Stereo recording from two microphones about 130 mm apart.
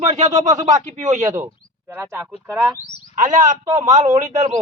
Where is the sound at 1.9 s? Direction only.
20° right (ahead or behind).